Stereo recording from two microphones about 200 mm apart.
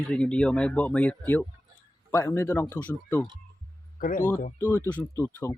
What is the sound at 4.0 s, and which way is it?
Speech, 40° left (ahead or behind).